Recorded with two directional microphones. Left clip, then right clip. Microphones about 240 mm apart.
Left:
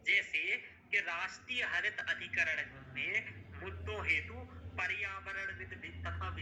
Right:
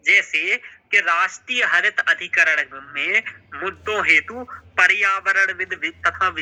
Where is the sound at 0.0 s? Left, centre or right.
Right.